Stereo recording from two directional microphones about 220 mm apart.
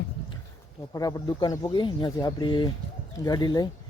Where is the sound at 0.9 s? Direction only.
15° left (ahead or behind).